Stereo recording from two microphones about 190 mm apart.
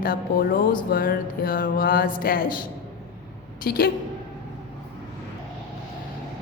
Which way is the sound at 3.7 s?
50° left (ahead or behind).